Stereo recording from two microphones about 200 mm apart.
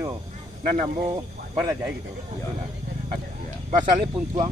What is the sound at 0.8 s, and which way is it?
Speech, 20° right (ahead or behind).